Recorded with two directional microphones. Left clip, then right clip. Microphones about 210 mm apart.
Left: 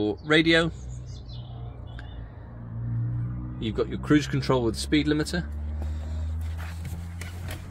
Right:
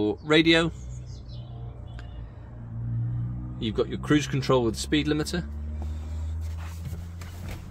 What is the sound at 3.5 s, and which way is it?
Speech, 10° left (ahead or behind).